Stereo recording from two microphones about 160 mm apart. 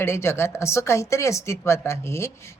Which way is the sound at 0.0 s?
15° left (ahead or behind).